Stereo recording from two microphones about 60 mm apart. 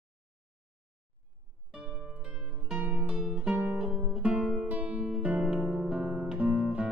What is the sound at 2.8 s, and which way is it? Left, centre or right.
Music, right.